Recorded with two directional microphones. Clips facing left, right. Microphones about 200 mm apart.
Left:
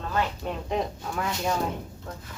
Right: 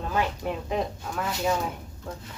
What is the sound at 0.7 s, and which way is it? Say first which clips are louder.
Speech: even; centre (ahead or behind).